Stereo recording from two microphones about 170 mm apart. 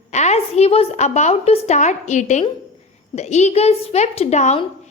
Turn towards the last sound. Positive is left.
turn(degrees=40)  # may be behind; listen again after turning